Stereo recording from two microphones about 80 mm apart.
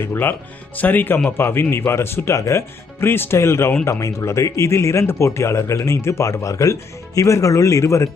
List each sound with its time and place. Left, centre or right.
0.0 s speech: left